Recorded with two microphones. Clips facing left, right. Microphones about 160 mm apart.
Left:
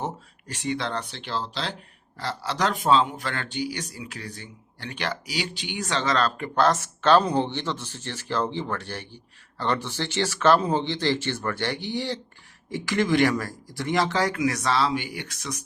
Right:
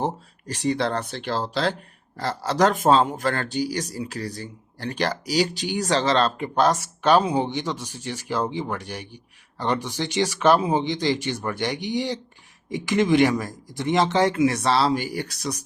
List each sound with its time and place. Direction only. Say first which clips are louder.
0.0 s a man's voice: right 5 dB; 35° right (ahead or behind)